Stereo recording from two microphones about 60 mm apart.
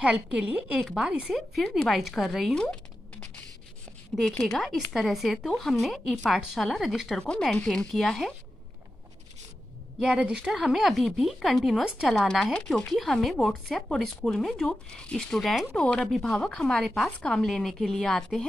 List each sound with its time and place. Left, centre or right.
0.0 s a woman's voice: centre
0.7 s speech: centre
1.0 s a woman's voice: right
1.3 s a woman's voice: centre
2.5 s a sound: centre
4.4 s a woman's voice: centre
7.2 s speech: centre
9.9 s a woman's voice: centre